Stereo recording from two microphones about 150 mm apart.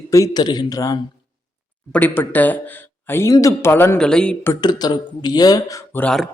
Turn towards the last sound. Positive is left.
turn(degrees=5)  # may be behind; listen again after turning